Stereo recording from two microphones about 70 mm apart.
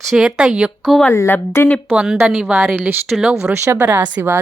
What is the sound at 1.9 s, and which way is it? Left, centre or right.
Speech, centre.